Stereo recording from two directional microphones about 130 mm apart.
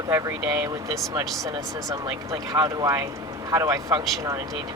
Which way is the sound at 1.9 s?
30° right (ahead or behind).